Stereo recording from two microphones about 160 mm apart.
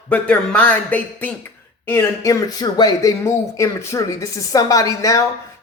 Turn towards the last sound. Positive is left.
turn(degrees=20)  # may be behind; listen again after turning